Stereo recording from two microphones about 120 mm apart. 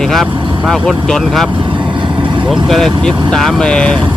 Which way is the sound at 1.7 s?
40° right (ahead or behind).